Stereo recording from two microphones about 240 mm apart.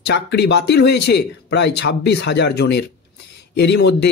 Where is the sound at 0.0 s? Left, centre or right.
Left.